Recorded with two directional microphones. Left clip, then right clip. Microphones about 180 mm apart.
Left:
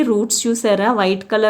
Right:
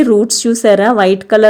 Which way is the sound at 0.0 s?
25° right (ahead or behind).